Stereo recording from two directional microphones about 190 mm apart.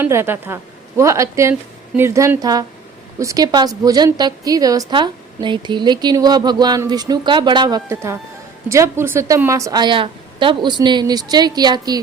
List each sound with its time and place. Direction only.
0.0 s a woman's voice: 10° right (ahead or behind)